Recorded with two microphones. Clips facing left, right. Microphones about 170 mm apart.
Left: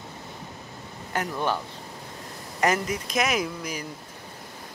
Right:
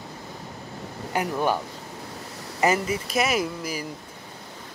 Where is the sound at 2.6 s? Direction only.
5° right (ahead or behind).